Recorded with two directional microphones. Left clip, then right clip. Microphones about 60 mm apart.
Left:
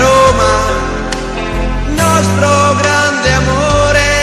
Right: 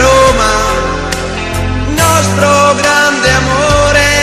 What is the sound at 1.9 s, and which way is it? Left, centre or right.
Music, right.